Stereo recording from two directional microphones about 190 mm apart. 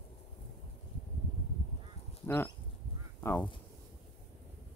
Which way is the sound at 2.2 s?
10° left (ahead or behind).